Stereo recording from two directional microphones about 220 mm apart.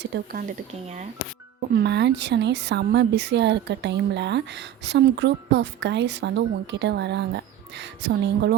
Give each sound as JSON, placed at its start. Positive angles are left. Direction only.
{"t": 0.0, "sound": "speech", "side_deg": -45}
{"t": 1.7, "sound": "speech", "side_deg": -50}